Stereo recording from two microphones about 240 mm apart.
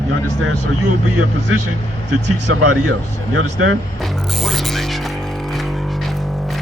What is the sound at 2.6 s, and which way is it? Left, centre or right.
Speech, right.